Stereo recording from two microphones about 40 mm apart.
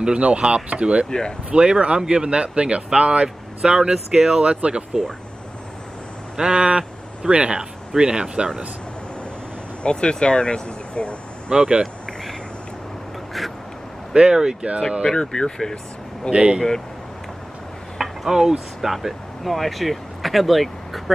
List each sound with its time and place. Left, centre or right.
0.0 s speech: right
3.9 s speech: centre
4.4 s speech: right
6.3 s speech: right
9.8 s speech: left
11.5 s speech: right
13.4 s speech: centre
14.3 s speech: centre
15.0 s speech: centre
16.3 s speech: right
17.9 s a sound: centre
18.8 s speech: centre